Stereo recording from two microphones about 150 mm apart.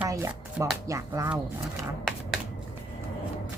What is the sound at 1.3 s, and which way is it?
Speech, centre (ahead or behind).